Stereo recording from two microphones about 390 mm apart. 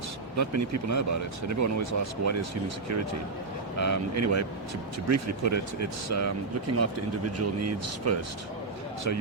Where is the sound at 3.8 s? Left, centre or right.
Right.